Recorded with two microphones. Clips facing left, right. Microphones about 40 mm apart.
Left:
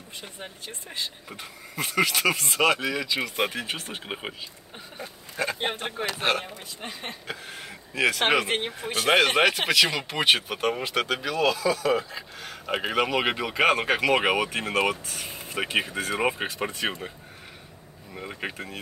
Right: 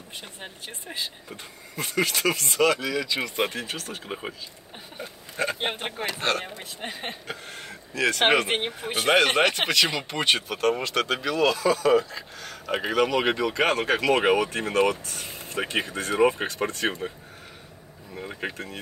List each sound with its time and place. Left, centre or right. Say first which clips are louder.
1.8 s speech: left 1 dB; centre
3.3 s speech: even; centre
3.6 s speech: left 1 dB; left
4.9 s speech: even; centre
6.1 s speech: left 1 dB; centre
6.8 s a woman's voice: right 3 dB; right
7.2 s speech: even; centre
7.9 s speech: left 1 dB; left
8.5 s speech: right 1 dB; centre
9.1 s speech: even; centre
11.1 s speech: right 2 dB; centre
15.2 s a sound: right 1 dB; left
15.7 s speech: left 1 dB; centre
18.1 s speech: right 1 dB; centre